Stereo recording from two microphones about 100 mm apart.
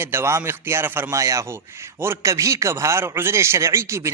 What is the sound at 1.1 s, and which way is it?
A man's voice, 30° right (ahead or behind).